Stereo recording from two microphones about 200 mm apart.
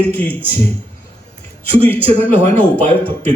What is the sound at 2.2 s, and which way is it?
Speech, 5° left (ahead or behind).